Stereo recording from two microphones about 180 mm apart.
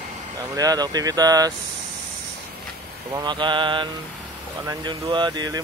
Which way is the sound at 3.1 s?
25° right (ahead or behind).